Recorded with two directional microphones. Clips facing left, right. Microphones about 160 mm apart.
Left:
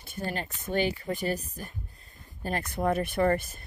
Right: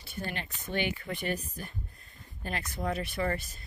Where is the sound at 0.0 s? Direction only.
45° left (ahead or behind).